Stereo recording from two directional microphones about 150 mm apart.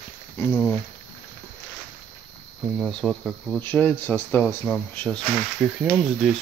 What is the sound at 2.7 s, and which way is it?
Speech, centre (ahead or behind).